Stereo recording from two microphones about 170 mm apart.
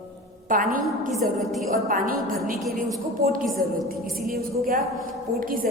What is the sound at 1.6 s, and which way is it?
Speech, 55° right (ahead or behind).